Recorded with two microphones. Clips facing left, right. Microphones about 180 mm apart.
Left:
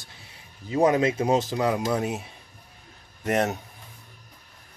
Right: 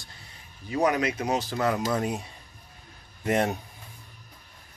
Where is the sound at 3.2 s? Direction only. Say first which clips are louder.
Left 1 dB; centre (ahead or behind).